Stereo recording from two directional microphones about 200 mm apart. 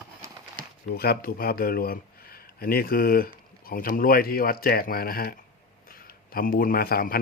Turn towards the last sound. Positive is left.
turn(degrees=50)  # may be behind; listen again after turning